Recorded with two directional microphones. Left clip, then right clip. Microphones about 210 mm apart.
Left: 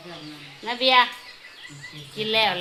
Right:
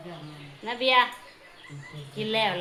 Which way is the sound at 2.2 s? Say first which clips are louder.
Left 4 dB; 10° left (ahead or behind).